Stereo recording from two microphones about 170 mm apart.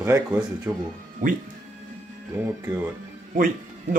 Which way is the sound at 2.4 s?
10° right (ahead or behind).